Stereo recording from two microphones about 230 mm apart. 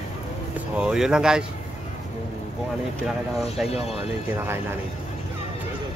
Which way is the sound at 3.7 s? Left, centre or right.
Left.